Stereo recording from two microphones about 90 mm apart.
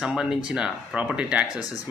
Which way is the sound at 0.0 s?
10° right (ahead or behind).